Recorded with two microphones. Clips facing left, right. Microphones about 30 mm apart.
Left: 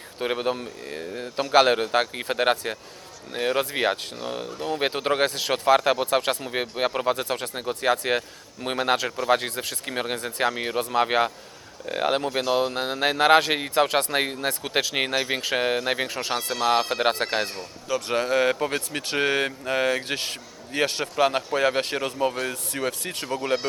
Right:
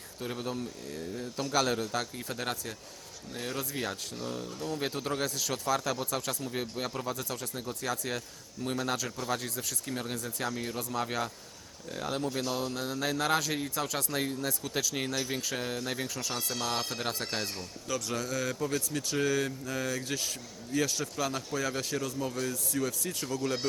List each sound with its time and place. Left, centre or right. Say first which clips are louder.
0.2 s speech: left 10 dB; left
17.6 s speech: left 7 dB; left
18.1 s speech: left 14 dB; left